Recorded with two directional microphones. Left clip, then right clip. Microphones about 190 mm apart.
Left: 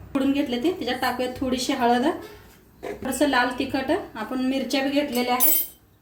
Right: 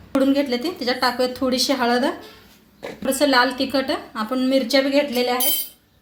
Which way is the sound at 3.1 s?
35° right (ahead or behind).